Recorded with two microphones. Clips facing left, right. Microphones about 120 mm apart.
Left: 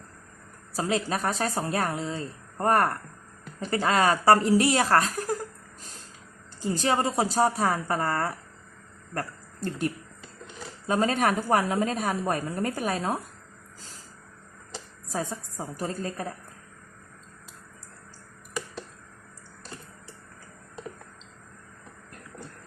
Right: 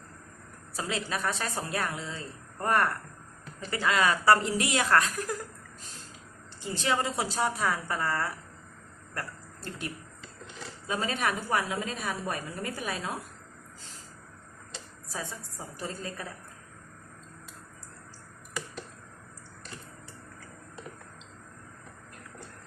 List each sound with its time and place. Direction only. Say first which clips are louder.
0.7 s a woman's voice: left 6 dB; 40° left (ahead or behind)
6.6 s a woman's voice: left 4 dB; 40° left (ahead or behind)
15.1 s a woman's voice: left 7 dB; 45° left (ahead or behind)